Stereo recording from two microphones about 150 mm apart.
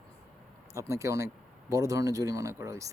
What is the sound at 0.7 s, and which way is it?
Speech, 20° right (ahead or behind).